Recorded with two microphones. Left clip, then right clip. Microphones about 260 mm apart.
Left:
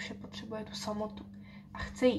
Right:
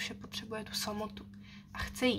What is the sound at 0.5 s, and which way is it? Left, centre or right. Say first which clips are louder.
Speech: right 2 dB; right.